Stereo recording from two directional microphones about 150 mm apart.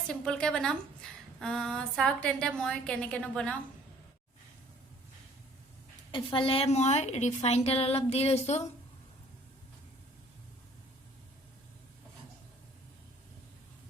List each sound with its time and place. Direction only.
0.1 s a woman's voice: 5° left (ahead or behind)
1.0 s a sound: 5° left (ahead or behind)
1.4 s a woman's voice: 5° left (ahead or behind)
6.1 s a woman's voice: 35° left (ahead or behind)